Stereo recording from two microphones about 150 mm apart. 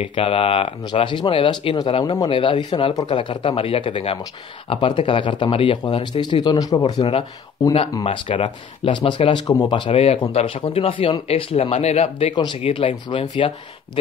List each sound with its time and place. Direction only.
0.0 s speech: 35° left (ahead or behind)
6.4 s speech: 25° left (ahead or behind); by 12.4 s 45° left (ahead or behind)
12.4 s speech: 35° left (ahead or behind)